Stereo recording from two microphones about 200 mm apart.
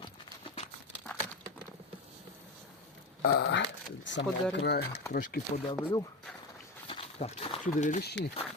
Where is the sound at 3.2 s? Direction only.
55° left (ahead or behind).